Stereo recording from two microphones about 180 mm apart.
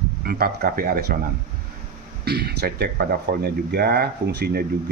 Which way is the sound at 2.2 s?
65° right (ahead or behind).